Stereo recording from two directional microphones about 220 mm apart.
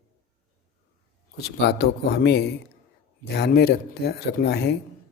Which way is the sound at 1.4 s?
50° left (ahead or behind).